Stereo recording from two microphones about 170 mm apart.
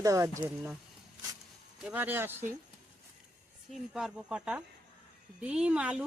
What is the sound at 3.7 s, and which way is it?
Speech, centre (ahead or behind).